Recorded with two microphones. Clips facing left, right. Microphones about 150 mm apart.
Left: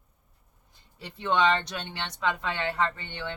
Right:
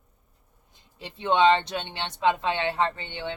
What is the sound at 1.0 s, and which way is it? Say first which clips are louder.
Speech: right 4 dB; 20° right (ahead or behind).